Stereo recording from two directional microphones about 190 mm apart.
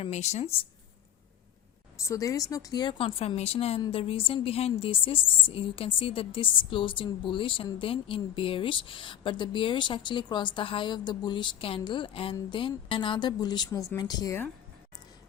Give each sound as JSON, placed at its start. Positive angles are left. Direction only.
{"t": 0.0, "sound": "speech", "side_deg": 35}
{"t": 2.0, "sound": "a woman's voice", "side_deg": 15}